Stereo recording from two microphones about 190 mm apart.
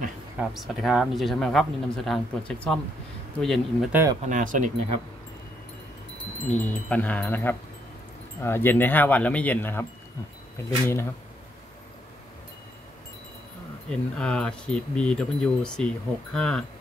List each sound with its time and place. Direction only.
0.4 s speech: centre (ahead or behind)
3.9 s speech: 15° right (ahead or behind)
4.2 s speech: 45° right (ahead or behind)
6.5 s speech: 5° left (ahead or behind)
13.8 s speech: 5° left (ahead or behind)